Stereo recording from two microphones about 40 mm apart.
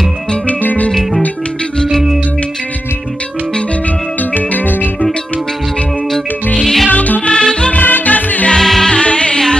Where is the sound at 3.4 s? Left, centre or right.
Left.